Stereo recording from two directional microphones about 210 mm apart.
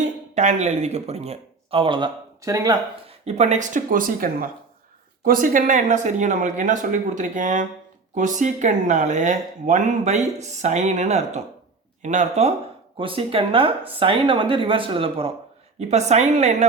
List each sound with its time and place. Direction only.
0.3 s speech: 35° right (ahead or behind); by 2.7 s 15° right (ahead or behind)
3.1 s speech: 30° right (ahead or behind)